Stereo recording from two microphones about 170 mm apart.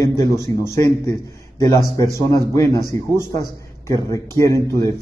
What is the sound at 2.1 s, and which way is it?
Speech, 20° left (ahead or behind).